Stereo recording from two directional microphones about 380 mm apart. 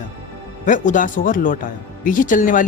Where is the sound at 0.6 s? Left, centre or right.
Centre.